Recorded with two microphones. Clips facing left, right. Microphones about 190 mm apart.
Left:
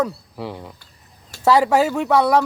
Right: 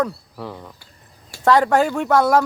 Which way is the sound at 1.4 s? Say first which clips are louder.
Even; 5° left (ahead or behind).